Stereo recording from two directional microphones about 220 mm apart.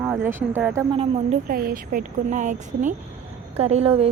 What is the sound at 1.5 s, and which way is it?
A woman's voice, 40° right (ahead or behind).